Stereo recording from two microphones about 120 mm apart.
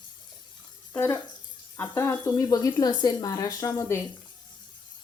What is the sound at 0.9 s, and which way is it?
A woman's voice, 20° left (ahead or behind).